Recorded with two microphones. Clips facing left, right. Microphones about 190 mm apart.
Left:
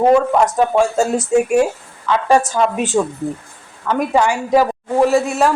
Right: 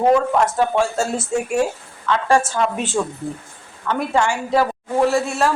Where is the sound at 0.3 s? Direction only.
15° left (ahead or behind).